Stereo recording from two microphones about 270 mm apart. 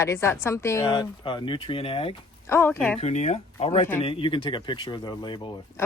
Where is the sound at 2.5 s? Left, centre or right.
Centre.